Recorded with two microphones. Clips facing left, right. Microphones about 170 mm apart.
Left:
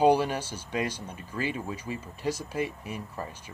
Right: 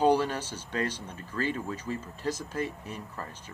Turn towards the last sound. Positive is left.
turn(degrees=10)  # may be behind; listen again after turning